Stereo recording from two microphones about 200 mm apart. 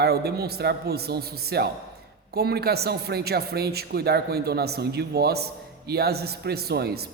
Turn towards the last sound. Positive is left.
turn(degrees=-50)  # may be behind; listen again after turning